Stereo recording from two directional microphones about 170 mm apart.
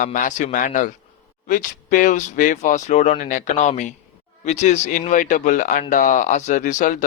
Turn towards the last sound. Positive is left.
turn(degrees=50)  # may be behind; listen again after turning